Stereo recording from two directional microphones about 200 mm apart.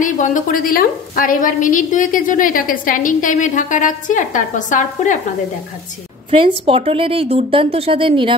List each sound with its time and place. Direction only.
0.0 s a woman's voice: 40° left (ahead or behind)
6.4 s speech: 25° right (ahead or behind)